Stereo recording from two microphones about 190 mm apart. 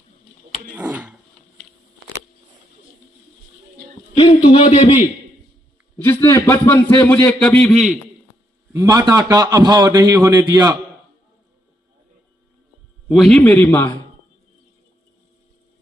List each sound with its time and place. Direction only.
0.7 s a sound: 10° right (ahead or behind)
4.2 s a man's voice: 30° left (ahead or behind)
6.0 s a man's voice: 15° left (ahead or behind)
8.7 s a man's voice: 15° right (ahead or behind)
13.1 s a man's voice: centre (ahead or behind)